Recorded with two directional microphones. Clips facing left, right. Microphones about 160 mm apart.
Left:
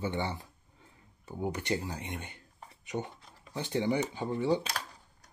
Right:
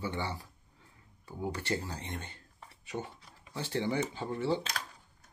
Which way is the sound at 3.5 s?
15° left (ahead or behind).